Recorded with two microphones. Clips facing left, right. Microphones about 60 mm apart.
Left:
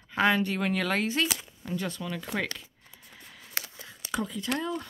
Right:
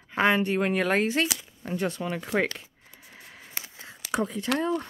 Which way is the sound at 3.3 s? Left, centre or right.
Right.